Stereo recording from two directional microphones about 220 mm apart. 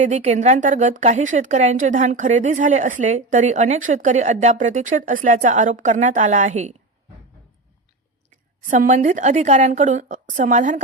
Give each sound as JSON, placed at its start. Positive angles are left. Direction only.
{"t": 0.0, "sound": "a woman's voice", "side_deg": -30}
{"t": 8.3, "sound": "a woman's voice", "side_deg": -35}